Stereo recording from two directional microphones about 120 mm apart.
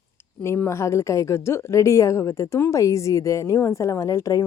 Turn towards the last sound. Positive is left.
turn(degrees=30)  # may be behind; listen again after turning